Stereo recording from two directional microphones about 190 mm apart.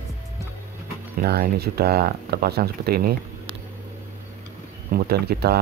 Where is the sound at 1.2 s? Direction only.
55° right (ahead or behind).